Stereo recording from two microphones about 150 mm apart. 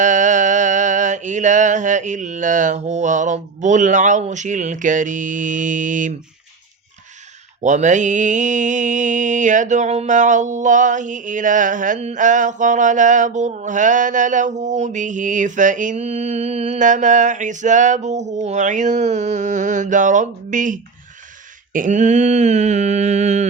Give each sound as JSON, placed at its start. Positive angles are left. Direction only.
{"t": 0.0, "sound": "mantra", "side_deg": -55}
{"t": 7.6, "sound": "mantra", "side_deg": -55}
{"t": 21.7, "sound": "a sound", "side_deg": -60}